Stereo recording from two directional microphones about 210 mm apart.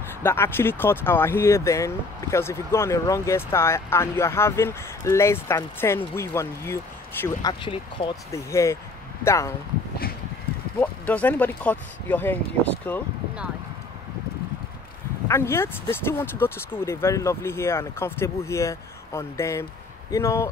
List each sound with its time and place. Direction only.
0.2 s speech: 10° left (ahead or behind)
7.6 s speech: 25° left (ahead or behind)
8.3 s speech: 15° left (ahead or behind)
10.8 s speech: 10° left (ahead or behind)
15.2 s speech: 10° left (ahead or behind)